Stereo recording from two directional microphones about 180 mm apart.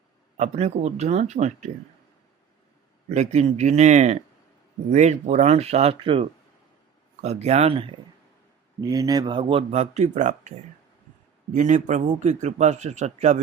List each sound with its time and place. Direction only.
0.3 s a man's voice: 40° right (ahead or behind)
3.1 s a man's voice: 40° right (ahead or behind)
11.5 s a man's voice: 45° right (ahead or behind)